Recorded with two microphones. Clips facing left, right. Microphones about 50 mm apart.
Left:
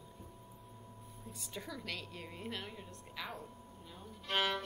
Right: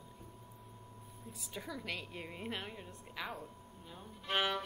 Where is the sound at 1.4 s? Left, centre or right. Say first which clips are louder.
Right 1 dB; centre.